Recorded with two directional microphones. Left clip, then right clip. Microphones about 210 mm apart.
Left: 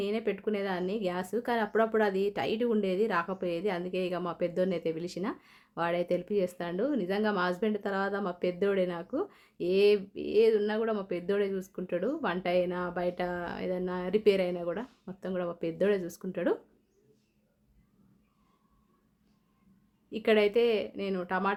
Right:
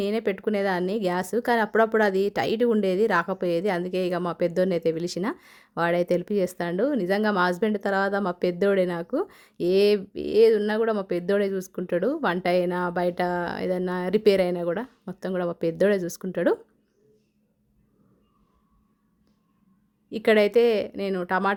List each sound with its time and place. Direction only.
0.0 s speech: 45° right (ahead or behind)
20.1 s speech: 45° right (ahead or behind)